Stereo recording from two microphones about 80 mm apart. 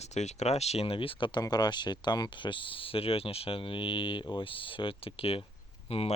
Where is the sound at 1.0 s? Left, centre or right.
Left.